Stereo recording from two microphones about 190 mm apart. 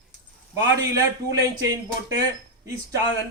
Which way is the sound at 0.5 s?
15° right (ahead or behind).